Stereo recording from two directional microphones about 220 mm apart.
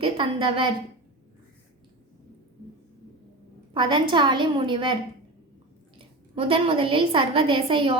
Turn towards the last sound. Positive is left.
turn(degrees=-25)  # may be behind; listen again after turning